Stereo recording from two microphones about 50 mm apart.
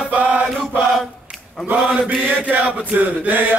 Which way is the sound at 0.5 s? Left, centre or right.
Centre.